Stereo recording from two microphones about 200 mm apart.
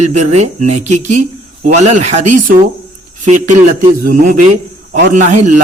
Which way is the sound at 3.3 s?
40° right (ahead or behind).